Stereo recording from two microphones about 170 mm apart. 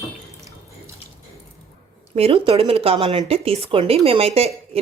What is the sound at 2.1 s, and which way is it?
Speech, 35° right (ahead or behind).